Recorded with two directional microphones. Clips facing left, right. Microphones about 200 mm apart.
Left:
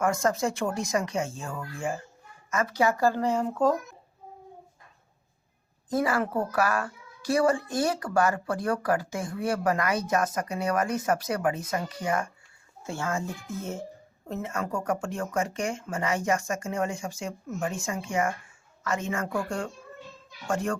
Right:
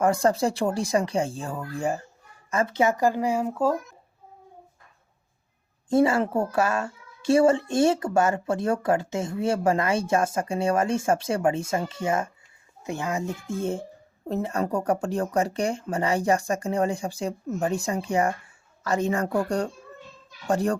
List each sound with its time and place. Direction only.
0.0 s speech: 35° right (ahead or behind); by 3.8 s 10° right (ahead or behind)
5.9 s a woman's voice: 25° right (ahead or behind)